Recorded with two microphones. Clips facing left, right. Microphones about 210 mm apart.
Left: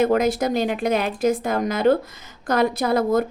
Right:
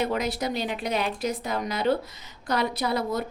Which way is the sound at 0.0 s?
50° left (ahead or behind).